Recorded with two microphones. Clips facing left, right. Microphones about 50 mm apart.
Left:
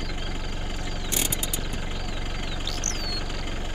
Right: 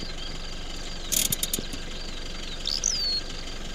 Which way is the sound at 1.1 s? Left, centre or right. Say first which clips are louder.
Left 2 dB; left.